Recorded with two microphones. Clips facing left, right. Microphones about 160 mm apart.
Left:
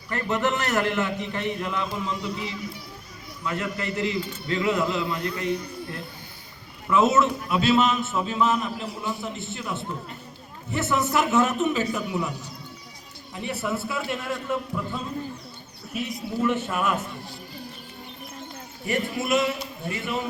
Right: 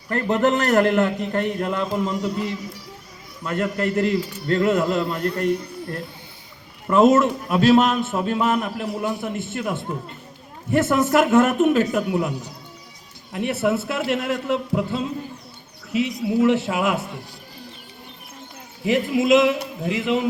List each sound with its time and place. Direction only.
0.3 s a man's voice: 55° right (ahead or behind)
13.3 s a man's voice: 70° right (ahead or behind); by 17.1 s 90° right
18.9 s a man's voice: 90° right